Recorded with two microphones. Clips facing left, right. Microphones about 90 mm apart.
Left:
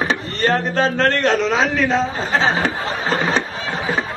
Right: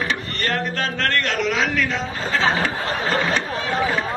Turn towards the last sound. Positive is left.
turn(degrees=25)  # may be behind; listen again after turning